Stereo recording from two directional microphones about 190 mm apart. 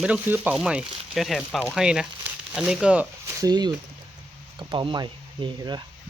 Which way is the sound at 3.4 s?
20° right (ahead or behind).